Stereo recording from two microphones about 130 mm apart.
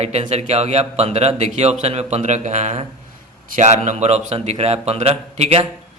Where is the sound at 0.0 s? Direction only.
55° right (ahead or behind).